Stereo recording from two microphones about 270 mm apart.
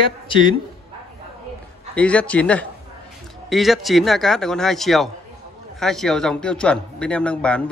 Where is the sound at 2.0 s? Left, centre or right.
Centre.